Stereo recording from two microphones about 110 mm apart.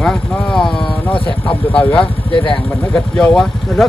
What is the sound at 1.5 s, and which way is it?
Speech, 50° left (ahead or behind).